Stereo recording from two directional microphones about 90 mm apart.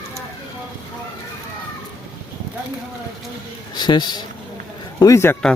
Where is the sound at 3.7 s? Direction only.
55° left (ahead or behind).